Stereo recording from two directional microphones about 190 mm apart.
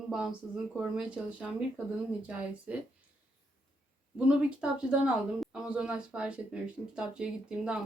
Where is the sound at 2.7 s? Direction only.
5° right (ahead or behind).